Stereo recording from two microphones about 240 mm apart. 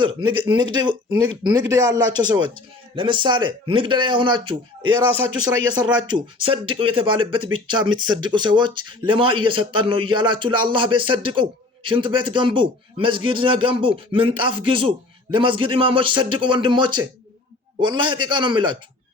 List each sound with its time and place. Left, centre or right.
0.0 s speech: centre